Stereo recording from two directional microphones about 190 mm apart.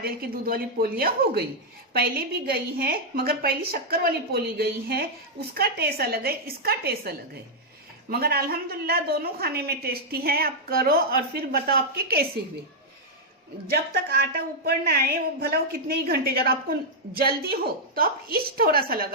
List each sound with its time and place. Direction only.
0.0 s a woman's voice: 50° right (ahead or behind)
13.7 s a woman's voice: 55° right (ahead or behind)
16.0 s a woman's voice: 55° right (ahead or behind)